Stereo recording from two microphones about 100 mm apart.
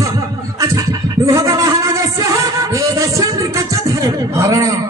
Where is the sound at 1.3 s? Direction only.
35° right (ahead or behind).